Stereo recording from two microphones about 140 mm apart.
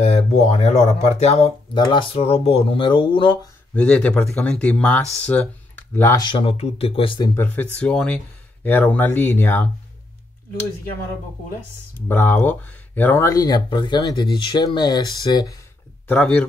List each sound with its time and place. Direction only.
0.0 s speech: 50° left (ahead or behind)
1.7 s speech: 35° left (ahead or behind)
2.1 s speech: 45° left (ahead or behind)
3.7 s speech: 10° left (ahead or behind)
6.1 s speech: 35° left (ahead or behind)
7.3 s speech: 10° left (ahead or behind)
12.1 s speech: 15° left (ahead or behind)
16.1 s speech: 10° left (ahead or behind)